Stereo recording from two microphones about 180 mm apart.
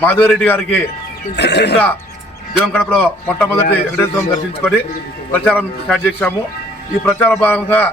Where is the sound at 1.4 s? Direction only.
70° left (ahead or behind).